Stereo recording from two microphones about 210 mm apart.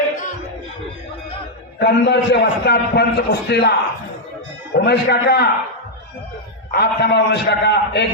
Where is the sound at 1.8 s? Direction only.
50° left (ahead or behind).